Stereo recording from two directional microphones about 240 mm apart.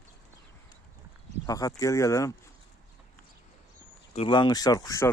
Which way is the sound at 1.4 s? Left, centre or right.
Centre.